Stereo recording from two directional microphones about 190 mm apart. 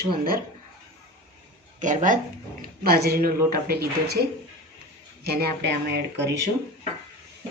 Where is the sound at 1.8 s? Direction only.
40° right (ahead or behind).